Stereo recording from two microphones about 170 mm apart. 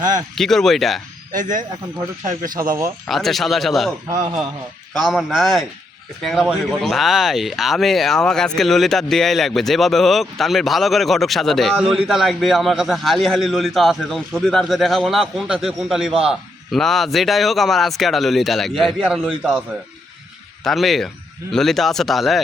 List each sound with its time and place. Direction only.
0.3 s speech: centre (ahead or behind)
2.2 s a man's voice: 50° right (ahead or behind)
3.1 s speech: centre (ahead or behind)
4.9 s speech: centre (ahead or behind)
20.7 s speech: centre (ahead or behind)